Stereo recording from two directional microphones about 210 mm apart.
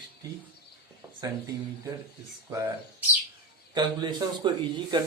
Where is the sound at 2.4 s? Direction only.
15° right (ahead or behind).